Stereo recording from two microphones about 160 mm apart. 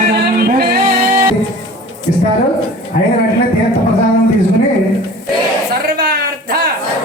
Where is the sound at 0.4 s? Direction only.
70° right (ahead or behind).